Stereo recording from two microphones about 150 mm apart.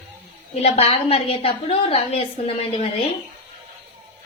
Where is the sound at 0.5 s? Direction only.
45° left (ahead or behind).